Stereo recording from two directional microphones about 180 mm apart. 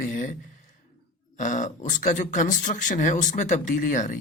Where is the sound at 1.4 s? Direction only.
45° left (ahead or behind).